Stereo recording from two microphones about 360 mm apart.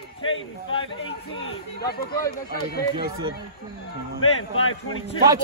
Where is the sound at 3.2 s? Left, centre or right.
Centre.